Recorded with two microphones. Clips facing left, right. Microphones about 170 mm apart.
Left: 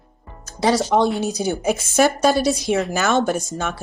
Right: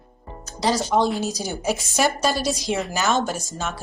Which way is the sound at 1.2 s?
60° left (ahead or behind).